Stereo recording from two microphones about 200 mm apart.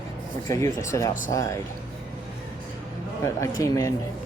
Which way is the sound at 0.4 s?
15° left (ahead or behind).